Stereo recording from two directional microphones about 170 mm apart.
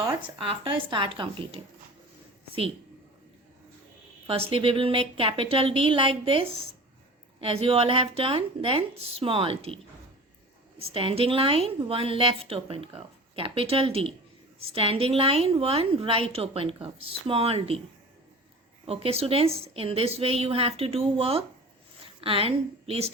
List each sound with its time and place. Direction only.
0.4 s a woman's voice: 30° right (ahead or behind)
4.3 s a woman's voice: 35° right (ahead or behind)
10.8 s a woman's voice: 35° right (ahead or behind)
18.9 s a woman's voice: 35° right (ahead or behind)